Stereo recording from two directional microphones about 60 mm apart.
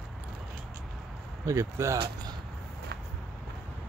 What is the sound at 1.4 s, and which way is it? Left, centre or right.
Speech, right.